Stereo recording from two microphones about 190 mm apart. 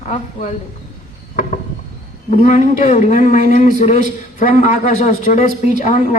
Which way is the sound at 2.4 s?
40° left (ahead or behind).